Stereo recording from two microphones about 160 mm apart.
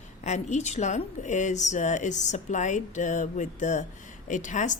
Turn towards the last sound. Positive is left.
turn(degrees=50)  # may be behind; listen again after turning